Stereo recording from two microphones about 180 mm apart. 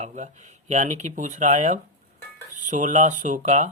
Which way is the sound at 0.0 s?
40° right (ahead or behind).